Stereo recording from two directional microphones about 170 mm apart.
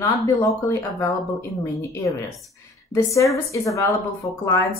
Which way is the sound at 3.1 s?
20° left (ahead or behind).